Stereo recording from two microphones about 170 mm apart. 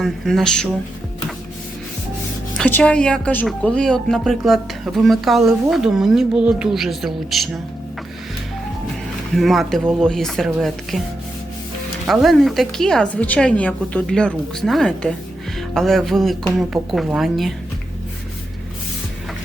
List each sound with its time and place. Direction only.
0.0 s speech: centre (ahead or behind)
2.6 s speech: 10° left (ahead or behind)
9.3 s speech: centre (ahead or behind)
12.0 s speech: centre (ahead or behind)